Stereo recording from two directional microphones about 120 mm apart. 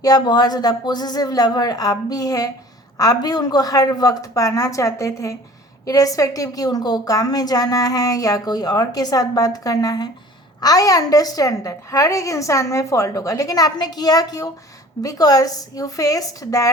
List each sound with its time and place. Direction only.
0.0 s a woman's voice: 35° left (ahead or behind)